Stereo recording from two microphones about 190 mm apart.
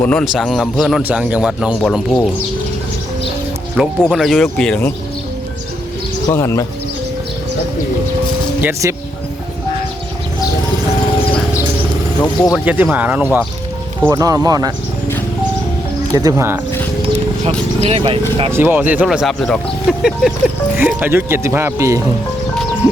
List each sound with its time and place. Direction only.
0.0 s a man's voice: 5° left (ahead or behind)
3.8 s a man's voice: centre (ahead or behind)
6.2 s speech: 15° left (ahead or behind)
8.6 s speech: 15° right (ahead or behind)
12.2 s speech: 20° left (ahead or behind)
12.5 s speech: 10° right (ahead or behind)
14.1 s speech: 20° right (ahead or behind)
16.1 s speech: 15° right (ahead or behind)
17.4 s speech: 35° right (ahead or behind)
18.5 s a man's voice: 10° right (ahead or behind)